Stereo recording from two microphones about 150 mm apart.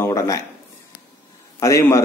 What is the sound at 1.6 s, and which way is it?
Speech, 20° left (ahead or behind).